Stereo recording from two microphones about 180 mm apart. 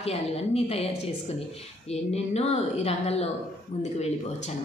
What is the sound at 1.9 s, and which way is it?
A woman's voice, 35° left (ahead or behind).